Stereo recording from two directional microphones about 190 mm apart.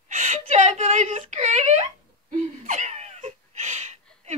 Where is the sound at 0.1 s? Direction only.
40° right (ahead or behind).